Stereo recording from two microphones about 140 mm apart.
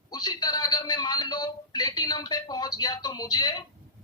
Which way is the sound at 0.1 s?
30° left (ahead or behind).